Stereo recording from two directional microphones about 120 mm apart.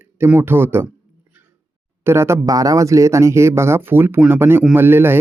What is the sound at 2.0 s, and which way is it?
Speech, 20° right (ahead or behind).